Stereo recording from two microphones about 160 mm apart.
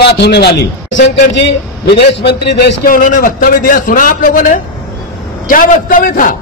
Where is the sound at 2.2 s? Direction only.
90° left; by 6.3 s 55° left (ahead or behind).